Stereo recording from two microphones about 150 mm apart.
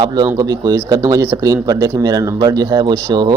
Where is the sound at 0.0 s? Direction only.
30° right (ahead or behind).